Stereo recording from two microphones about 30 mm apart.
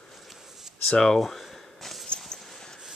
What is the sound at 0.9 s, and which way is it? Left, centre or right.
Speech, left.